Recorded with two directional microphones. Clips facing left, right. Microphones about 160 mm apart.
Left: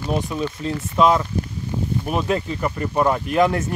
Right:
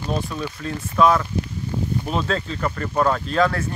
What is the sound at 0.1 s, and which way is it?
Speech, 15° left (ahead or behind).